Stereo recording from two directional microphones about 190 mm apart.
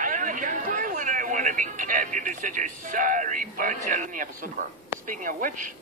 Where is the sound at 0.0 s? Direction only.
45° right (ahead or behind).